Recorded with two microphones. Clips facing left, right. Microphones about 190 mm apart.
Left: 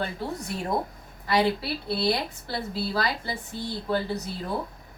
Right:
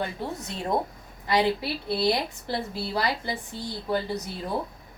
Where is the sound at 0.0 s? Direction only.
20° right (ahead or behind).